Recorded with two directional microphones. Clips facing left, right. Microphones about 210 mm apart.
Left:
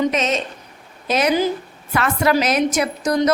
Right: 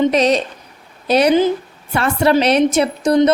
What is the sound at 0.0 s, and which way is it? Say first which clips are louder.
A woman's voice: right 6 dB; 35° right (ahead or behind).